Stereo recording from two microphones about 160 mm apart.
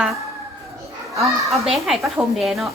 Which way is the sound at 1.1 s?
20° right (ahead or behind).